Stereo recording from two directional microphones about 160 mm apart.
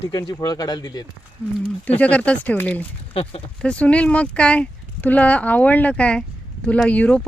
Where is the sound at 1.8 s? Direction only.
10° left (ahead or behind).